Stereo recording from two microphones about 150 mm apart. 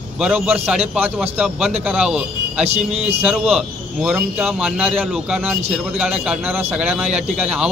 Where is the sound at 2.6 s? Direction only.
45° right (ahead or behind).